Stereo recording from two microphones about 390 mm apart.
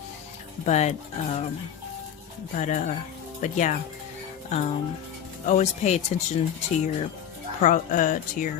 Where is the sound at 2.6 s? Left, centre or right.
Centre.